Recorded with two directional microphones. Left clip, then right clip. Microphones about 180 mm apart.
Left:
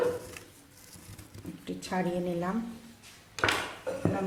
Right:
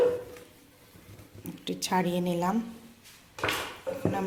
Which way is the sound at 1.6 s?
45° right (ahead or behind).